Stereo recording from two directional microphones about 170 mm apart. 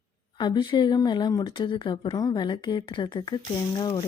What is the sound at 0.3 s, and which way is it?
Speech, 25° left (ahead or behind).